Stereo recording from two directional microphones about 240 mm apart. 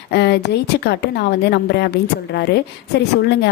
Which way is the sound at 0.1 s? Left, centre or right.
Left.